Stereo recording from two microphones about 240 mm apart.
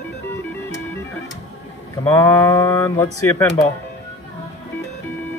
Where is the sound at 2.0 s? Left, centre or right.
Centre.